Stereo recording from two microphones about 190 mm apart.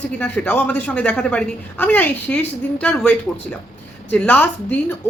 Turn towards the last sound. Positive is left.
turn(degrees=10)  # may be behind; listen again after turning